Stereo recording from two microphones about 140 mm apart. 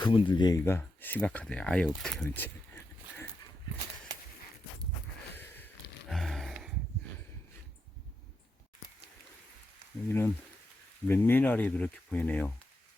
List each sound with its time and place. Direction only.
0.0 s speech: 35° left (ahead or behind); by 2.5 s 10° left (ahead or behind)
6.1 s a sound: centre (ahead or behind)
10.1 s speech: 15° left (ahead or behind)